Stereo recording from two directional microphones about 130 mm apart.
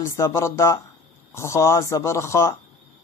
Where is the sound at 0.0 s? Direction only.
20° left (ahead or behind).